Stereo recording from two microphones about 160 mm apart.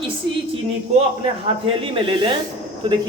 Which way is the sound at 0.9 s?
40° right (ahead or behind).